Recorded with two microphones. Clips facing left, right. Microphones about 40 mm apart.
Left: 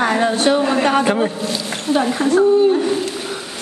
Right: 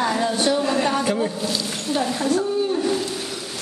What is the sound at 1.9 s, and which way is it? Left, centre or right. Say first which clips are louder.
Speech: left 5 dB; left.